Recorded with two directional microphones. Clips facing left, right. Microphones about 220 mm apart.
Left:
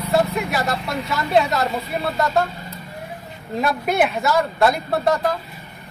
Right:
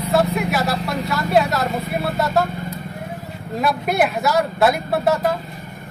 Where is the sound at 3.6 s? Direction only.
Centre (ahead or behind).